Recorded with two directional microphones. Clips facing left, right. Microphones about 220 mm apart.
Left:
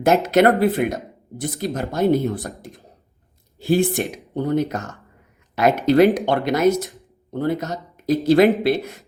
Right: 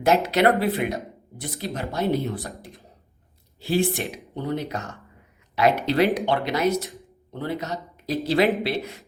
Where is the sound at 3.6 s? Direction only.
45° left (ahead or behind).